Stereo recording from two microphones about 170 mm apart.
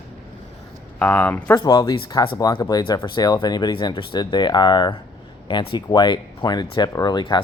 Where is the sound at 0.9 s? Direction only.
10° left (ahead or behind).